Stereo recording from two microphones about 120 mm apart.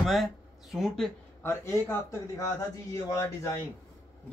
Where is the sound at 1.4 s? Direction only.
20° left (ahead or behind).